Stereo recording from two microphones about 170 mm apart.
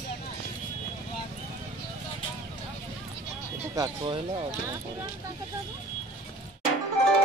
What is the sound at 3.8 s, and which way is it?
Speech, 30° right (ahead or behind).